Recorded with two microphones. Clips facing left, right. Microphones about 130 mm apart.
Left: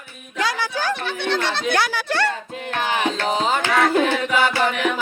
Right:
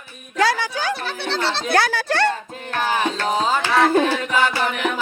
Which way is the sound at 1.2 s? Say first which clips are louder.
Left 1 dB; 30° right (ahead or behind).